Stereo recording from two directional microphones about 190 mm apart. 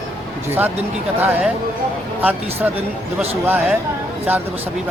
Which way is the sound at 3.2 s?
10° right (ahead or behind).